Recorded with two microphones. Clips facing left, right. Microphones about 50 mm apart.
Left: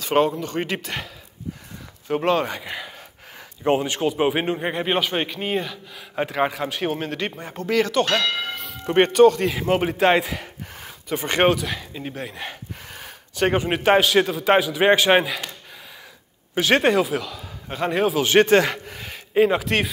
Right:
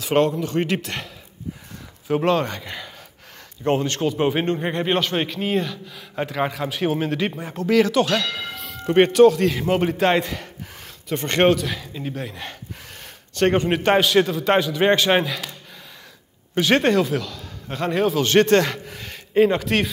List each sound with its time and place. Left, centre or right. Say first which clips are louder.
0.0 s a man's voice: right 1 dB; centre
8.1 s speech: left 1 dB; left
8.4 s a man's voice: left 2 dB; centre
16.5 s a man's voice: even; centre